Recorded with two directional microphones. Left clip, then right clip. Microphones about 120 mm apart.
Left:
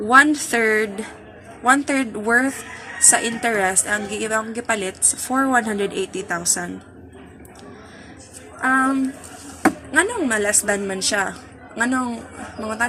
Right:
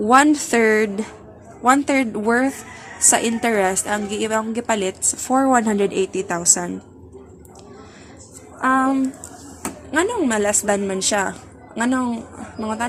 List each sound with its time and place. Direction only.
0.1 s a woman's voice: 40° right (ahead or behind)
8.6 s a woman's voice: 40° right (ahead or behind)
9.9 s a woman's voice: 25° right (ahead or behind)